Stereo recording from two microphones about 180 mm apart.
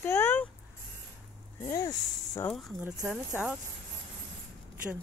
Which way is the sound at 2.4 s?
Centre (ahead or behind).